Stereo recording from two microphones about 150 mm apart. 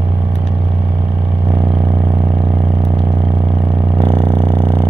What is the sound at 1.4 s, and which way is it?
Vehicle, 25° right (ahead or behind).